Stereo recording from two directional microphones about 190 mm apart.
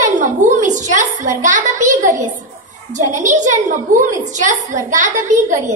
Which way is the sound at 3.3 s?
40° right (ahead or behind).